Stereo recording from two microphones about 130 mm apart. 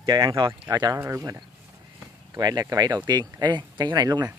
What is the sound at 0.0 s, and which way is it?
Speech, 35° right (ahead or behind).